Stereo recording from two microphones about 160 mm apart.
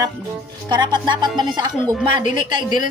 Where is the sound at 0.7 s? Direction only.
25° right (ahead or behind).